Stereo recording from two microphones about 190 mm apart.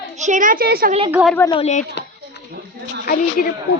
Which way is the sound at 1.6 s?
40° left (ahead or behind).